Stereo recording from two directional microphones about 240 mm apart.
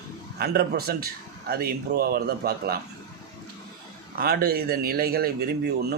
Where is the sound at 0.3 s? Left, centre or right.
Right.